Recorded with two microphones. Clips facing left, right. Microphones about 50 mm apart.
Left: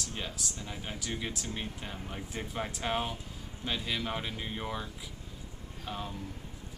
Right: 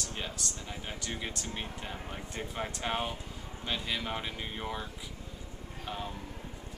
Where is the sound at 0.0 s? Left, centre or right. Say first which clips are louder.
Even; centre.